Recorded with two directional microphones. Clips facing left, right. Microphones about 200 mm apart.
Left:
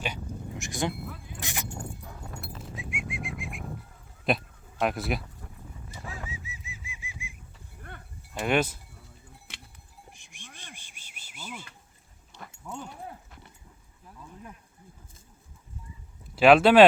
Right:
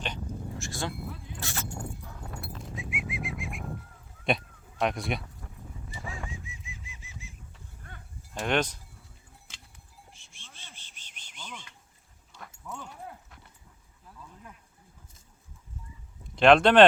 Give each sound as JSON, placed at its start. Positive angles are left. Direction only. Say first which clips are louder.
{"t": 0.0, "sound": "dog", "louder": "left 1 dB", "side_deg": 15}
{"t": 2.5, "sound": "bird", "louder": "right 1 dB", "side_deg": 0}
{"t": 4.2, "sound": "a sound", "louder": "left 1 dB", "side_deg": 0}
{"t": 6.1, "sound": "bird flight", "louder": "even", "side_deg": 5}
{"t": 7.9, "sound": "livestock", "louder": "left 5 dB", "side_deg": 65}
{"t": 8.3, "sound": "speech", "louder": "left 2 dB", "side_deg": 5}
{"t": 9.5, "sound": "cowbell", "louder": "left 7 dB", "side_deg": 65}
{"t": 10.1, "sound": "a sound", "louder": "left 5 dB", "side_deg": 15}
{"t": 12.5, "sound": "dog", "louder": "left 3 dB", "side_deg": 30}
{"t": 16.3, "sound": "speech", "louder": "left 2 dB", "side_deg": 5}